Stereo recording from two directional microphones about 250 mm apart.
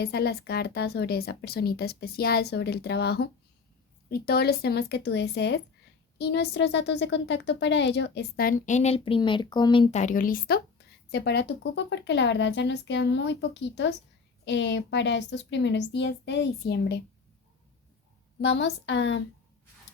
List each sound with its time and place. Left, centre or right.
0.0 s speech: left
18.4 s speech: left